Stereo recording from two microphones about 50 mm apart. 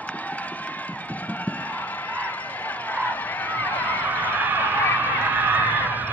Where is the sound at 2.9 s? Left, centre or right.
Left.